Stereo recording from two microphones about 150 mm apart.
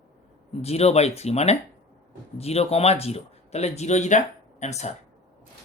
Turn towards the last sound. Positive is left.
turn(degrees=50)  # may be behind; listen again after turning